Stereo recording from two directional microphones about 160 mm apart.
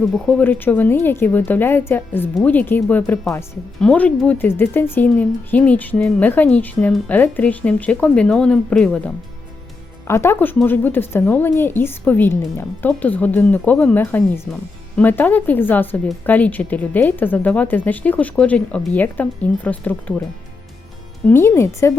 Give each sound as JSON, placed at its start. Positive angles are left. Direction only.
{"t": 0.3, "sound": "a woman's voice", "side_deg": 10}
{"t": 21.2, "sound": "a woman's voice", "side_deg": 15}